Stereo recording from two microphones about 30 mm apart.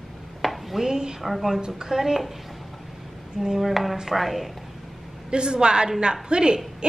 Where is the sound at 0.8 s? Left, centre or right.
Right.